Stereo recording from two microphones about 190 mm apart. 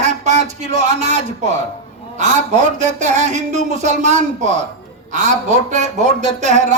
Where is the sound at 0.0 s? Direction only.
40° right (ahead or behind).